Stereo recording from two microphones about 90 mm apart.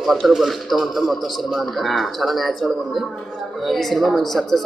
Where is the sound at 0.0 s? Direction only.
Centre (ahead or behind).